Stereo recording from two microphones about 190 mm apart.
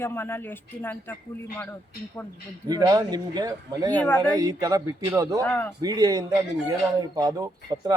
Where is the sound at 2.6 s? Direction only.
20° right (ahead or behind).